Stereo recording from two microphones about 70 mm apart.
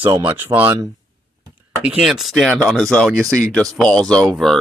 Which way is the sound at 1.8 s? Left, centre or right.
Centre.